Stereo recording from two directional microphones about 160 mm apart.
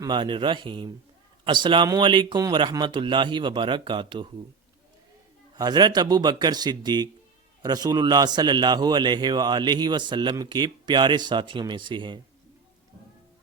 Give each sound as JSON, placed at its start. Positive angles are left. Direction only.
{"t": 0.0, "sound": "a man's voice", "side_deg": -30}
{"t": 5.5, "sound": "a man's voice", "side_deg": -25}